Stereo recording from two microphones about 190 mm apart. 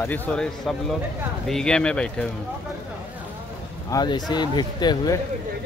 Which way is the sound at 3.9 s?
25° left (ahead or behind).